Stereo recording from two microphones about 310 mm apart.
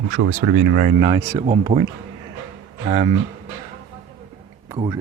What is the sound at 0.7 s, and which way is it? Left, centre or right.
Speech, right.